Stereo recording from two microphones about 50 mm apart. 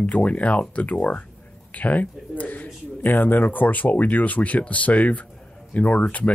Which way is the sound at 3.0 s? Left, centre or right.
Left.